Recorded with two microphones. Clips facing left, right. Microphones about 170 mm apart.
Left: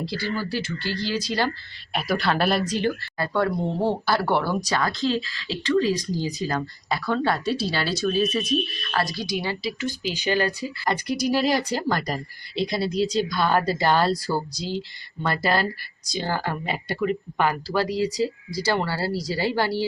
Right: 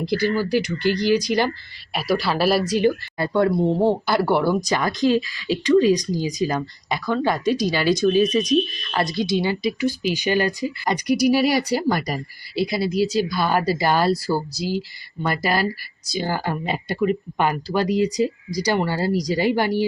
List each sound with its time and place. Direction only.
0.0 s speech: 15° right (ahead or behind)
1.9 s speech: 5° right (ahead or behind); by 9.7 s 25° right (ahead or behind)
9.8 s speech: 15° right (ahead or behind)